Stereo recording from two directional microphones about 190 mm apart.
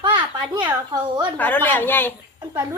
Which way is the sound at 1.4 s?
10° left (ahead or behind).